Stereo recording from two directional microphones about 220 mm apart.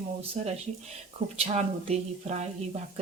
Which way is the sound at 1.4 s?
30° right (ahead or behind).